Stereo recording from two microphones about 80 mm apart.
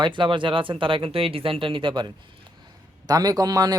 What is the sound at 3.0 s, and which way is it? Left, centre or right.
Speech, right.